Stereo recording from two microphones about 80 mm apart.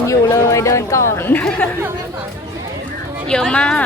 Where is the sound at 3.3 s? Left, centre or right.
Centre.